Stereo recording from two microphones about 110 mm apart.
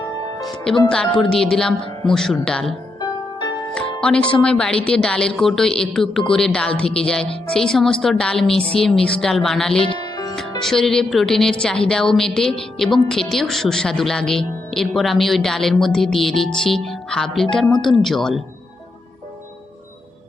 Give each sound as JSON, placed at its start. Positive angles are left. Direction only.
{"t": 0.4, "sound": "a woman's voice", "side_deg": 5}
{"t": 4.3, "sound": "a woman's voice", "side_deg": 10}
{"t": 9.8, "sound": "music", "side_deg": 50}
{"t": 10.6, "sound": "a woman's voice", "side_deg": 5}